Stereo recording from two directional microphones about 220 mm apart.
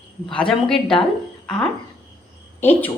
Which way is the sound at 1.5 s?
5° left (ahead or behind).